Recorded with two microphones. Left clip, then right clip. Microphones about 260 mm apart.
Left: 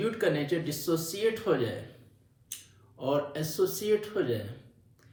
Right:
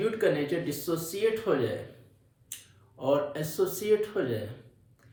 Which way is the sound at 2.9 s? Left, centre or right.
Centre.